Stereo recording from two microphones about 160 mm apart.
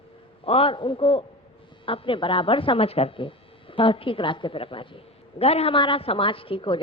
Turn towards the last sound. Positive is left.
turn(degrees=30)  # may be behind; listen again after turning